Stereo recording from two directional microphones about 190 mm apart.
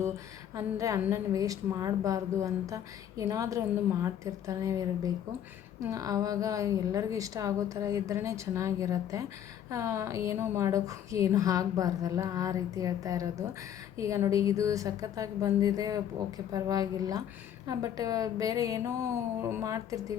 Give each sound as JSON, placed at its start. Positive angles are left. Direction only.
{"t": 0.5, "sound": "a woman's voice", "side_deg": -15}
{"t": 5.9, "sound": "a woman's voice", "side_deg": -20}